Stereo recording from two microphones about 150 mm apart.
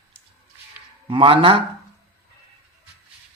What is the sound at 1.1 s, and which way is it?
Speech, 35° right (ahead or behind).